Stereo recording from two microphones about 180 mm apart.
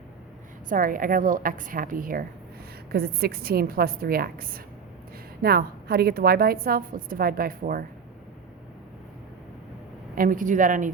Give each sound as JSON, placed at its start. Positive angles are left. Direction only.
{"t": 0.7, "sound": "a woman's voice", "side_deg": -50}
{"t": 10.2, "sound": "a woman's voice", "side_deg": -50}